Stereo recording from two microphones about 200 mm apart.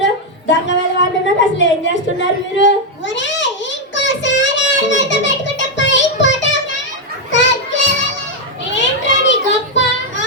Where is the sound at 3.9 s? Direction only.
65° left (ahead or behind).